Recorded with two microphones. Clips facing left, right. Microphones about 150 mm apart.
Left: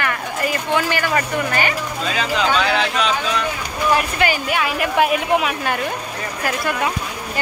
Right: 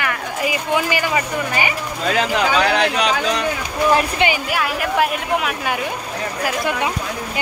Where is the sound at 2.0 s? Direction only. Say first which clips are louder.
Right 3 dB; 65° right (ahead or behind).